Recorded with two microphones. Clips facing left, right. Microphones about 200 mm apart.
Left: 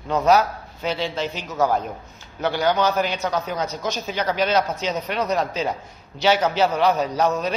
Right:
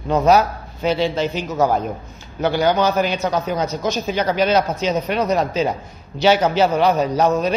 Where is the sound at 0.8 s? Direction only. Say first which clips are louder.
Right 6 dB; 10° right (ahead or behind).